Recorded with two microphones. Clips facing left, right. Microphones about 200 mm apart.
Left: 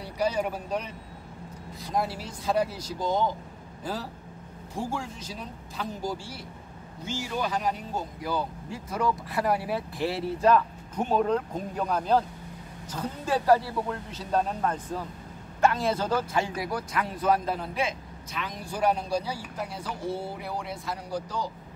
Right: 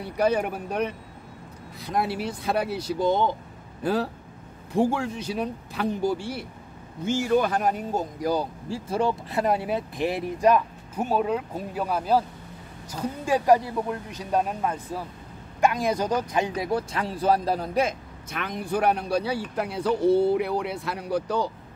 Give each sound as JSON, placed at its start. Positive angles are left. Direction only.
{"t": 0.0, "sound": "speech", "side_deg": -55}